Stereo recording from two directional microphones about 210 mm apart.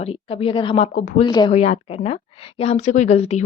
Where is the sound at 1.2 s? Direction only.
20° left (ahead or behind).